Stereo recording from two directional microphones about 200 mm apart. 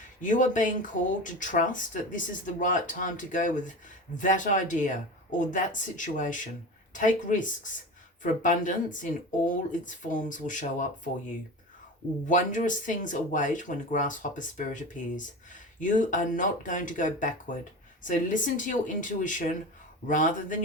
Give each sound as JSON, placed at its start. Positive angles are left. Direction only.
{"t": 0.2, "sound": "speech", "side_deg": 40}
{"t": 12.3, "sound": "speech", "side_deg": 40}